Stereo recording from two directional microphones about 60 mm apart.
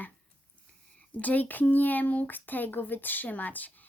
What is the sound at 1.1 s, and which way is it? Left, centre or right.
Speech, left.